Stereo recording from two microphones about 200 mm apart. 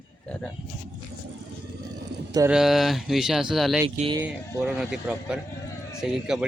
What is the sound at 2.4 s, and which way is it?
Speech, centre (ahead or behind).